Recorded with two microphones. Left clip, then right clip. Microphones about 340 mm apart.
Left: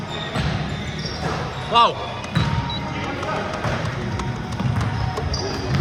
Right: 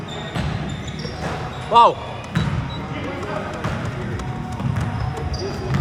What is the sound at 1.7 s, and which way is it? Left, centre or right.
Speech, centre.